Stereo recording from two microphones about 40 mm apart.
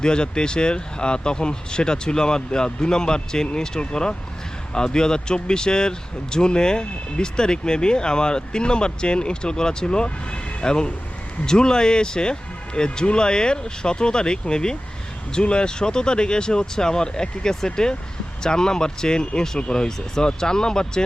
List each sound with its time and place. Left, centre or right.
0.0 s speech: left